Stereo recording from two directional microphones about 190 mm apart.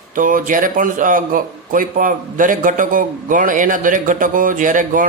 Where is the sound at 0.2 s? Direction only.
45° right (ahead or behind).